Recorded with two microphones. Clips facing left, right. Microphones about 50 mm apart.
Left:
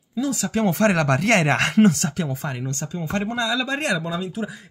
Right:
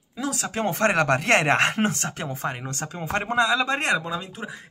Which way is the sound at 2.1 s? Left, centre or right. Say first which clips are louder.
Left 2 dB; right.